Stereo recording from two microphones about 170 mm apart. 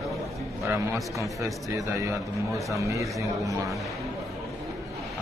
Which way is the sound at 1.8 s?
20° right (ahead or behind).